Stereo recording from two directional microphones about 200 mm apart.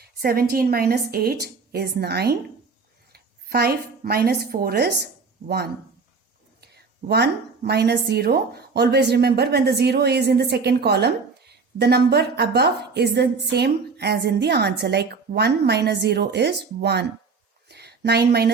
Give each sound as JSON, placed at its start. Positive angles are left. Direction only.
{"t": 0.0, "sound": "a woman's voice", "side_deg": -50}